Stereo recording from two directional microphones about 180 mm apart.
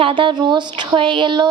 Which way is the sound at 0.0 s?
25° right (ahead or behind).